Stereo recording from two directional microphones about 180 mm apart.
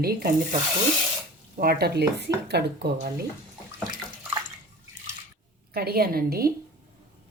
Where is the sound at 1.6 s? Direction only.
60° right (ahead or behind).